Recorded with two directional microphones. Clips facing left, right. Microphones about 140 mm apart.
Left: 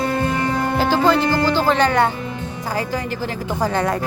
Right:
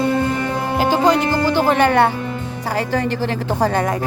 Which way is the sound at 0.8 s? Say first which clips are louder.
Right 2 dB; 15° right (ahead or behind).